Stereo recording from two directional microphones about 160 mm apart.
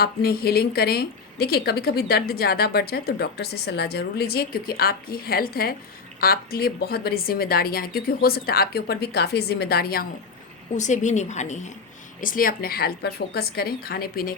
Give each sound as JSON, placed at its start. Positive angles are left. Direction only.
{"t": 0.0, "sound": "a woman's voice", "side_deg": 75}
{"t": 10.8, "sound": "a woman's voice", "side_deg": 50}
{"t": 12.2, "sound": "a woman's voice", "side_deg": 60}